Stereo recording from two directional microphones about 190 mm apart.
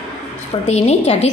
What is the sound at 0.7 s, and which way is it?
Speech, 35° left (ahead or behind).